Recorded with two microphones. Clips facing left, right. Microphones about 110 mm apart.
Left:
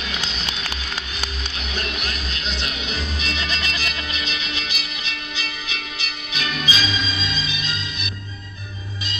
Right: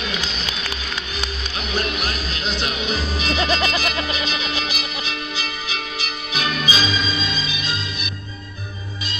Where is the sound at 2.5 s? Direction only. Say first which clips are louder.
Right 6 dB; 40° right (ahead or behind).